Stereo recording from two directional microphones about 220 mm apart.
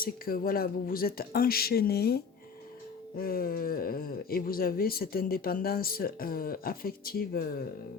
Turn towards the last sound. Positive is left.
turn(degrees=40)  # may be behind; listen again after turning